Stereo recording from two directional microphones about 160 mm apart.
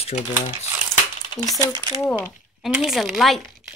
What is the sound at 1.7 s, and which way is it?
Speech, 20° right (ahead or behind).